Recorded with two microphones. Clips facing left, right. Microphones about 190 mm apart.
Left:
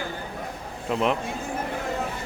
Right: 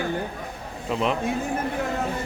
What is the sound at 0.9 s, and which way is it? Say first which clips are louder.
Speech: left 1 dB; centre (ahead or behind).